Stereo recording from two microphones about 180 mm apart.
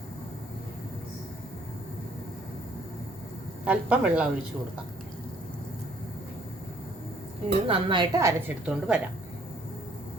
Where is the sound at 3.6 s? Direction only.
5° right (ahead or behind).